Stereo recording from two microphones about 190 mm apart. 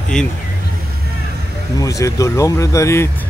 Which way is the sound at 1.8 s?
15° left (ahead or behind).